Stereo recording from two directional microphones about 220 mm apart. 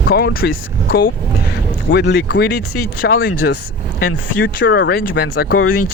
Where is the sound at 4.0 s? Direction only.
55° left (ahead or behind).